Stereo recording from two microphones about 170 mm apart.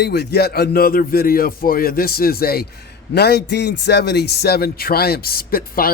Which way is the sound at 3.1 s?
75° left (ahead or behind).